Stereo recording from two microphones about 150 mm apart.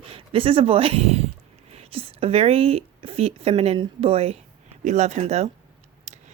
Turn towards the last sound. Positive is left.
turn(degrees=-50)  # may be behind; listen again after turning